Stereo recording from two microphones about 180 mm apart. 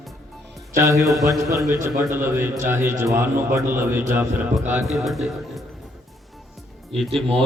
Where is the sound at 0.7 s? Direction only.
15° right (ahead or behind); by 5.6 s centre (ahead or behind).